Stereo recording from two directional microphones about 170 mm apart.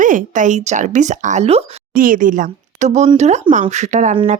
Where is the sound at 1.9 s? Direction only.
55° right (ahead or behind).